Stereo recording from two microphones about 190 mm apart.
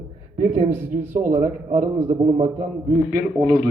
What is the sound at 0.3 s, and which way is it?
A man's voice, 40° right (ahead or behind).